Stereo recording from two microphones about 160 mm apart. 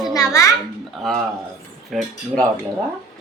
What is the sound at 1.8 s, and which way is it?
Speech, 5° left (ahead or behind).